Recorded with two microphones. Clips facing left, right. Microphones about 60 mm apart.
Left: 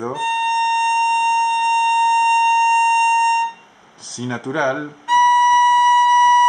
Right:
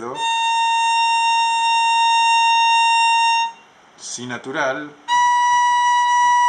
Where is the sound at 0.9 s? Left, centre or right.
Right.